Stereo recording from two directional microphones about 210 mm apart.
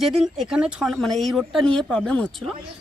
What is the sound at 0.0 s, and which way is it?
Speech, centre (ahead or behind).